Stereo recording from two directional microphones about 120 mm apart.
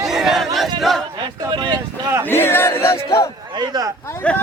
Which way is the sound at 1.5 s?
40° right (ahead or behind).